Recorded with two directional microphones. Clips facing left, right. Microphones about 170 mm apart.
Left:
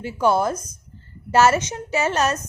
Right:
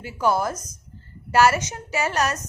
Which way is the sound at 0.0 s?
25° left (ahead or behind).